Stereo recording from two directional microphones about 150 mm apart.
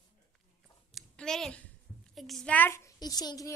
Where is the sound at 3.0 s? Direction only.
25° left (ahead or behind).